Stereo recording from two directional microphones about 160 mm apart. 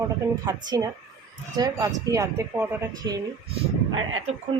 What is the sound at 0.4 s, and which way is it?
Speech, 20° right (ahead or behind).